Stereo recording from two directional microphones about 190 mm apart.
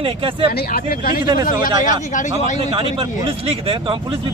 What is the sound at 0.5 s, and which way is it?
Speech, 50° left (ahead or behind).